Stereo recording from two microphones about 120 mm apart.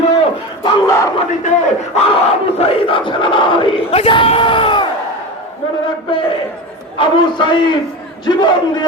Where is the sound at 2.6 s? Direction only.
50° left (ahead or behind).